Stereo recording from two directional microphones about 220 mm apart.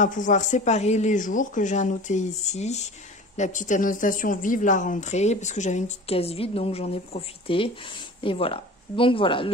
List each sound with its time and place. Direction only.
0.0 s speech: 35° left (ahead or behind)